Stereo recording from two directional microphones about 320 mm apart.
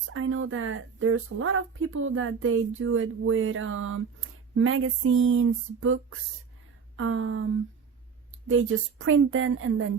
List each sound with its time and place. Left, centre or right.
0.1 s speech: right
8.4 s speech: right